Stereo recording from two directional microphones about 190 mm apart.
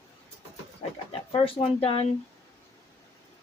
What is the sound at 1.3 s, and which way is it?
Speech, 30° left (ahead or behind).